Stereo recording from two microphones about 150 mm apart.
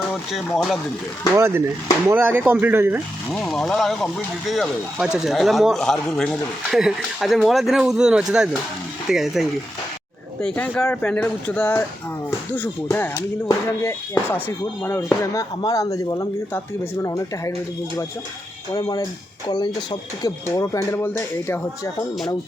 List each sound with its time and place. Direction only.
0.3 s speech: centre (ahead or behind)
1.3 s speech: 15° right (ahead or behind)
3.3 s speech: centre (ahead or behind); by 17.5 s 20° left (ahead or behind)
18.7 s speech: 25° left (ahead or behind)